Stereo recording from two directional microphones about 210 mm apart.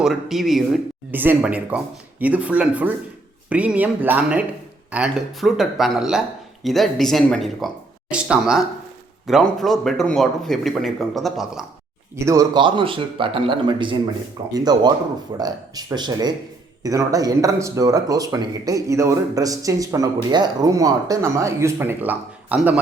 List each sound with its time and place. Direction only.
0.0 s speech: centre (ahead or behind)
12.2 s a man's voice: 15° right (ahead or behind)